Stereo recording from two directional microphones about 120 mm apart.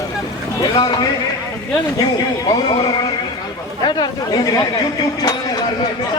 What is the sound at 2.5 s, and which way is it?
Speech, 40° left (ahead or behind).